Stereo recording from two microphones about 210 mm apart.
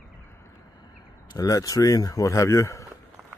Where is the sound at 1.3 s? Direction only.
15° left (ahead or behind).